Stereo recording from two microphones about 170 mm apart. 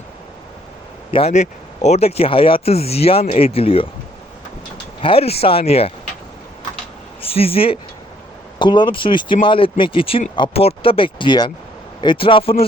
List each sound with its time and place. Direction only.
1.1 s speech: 40° left (ahead or behind)
4.9 s speech: 35° left (ahead or behind)
7.2 s speech: 35° left (ahead or behind)